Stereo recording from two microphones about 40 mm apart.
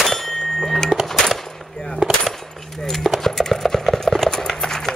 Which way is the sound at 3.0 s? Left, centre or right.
Centre.